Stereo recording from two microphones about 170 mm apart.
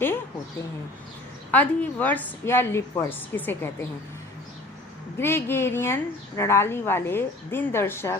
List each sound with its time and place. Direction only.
1.5 s speech: 10° left (ahead or behind)
5.1 s speech: 15° left (ahead or behind)